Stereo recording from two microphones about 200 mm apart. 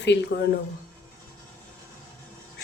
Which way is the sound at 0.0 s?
55° left (ahead or behind).